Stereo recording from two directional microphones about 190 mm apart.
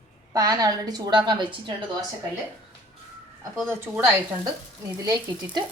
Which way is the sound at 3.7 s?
10° right (ahead or behind).